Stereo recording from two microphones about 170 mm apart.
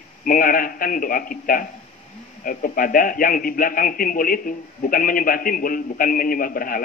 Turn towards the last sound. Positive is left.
turn(degrees=55)  # may be behind; listen again after turning